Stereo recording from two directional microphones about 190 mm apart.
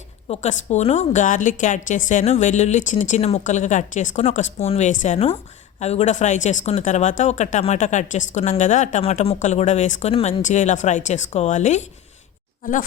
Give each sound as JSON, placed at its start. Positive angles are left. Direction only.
{"t": 0.3, "sound": "speech", "side_deg": 35}